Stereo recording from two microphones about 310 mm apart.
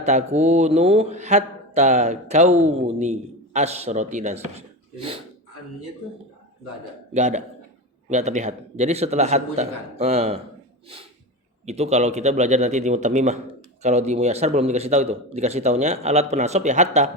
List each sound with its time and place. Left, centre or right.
0.0 s speech: right
4.5 s a sound: centre
7.1 s speech: right
11.6 s speech: right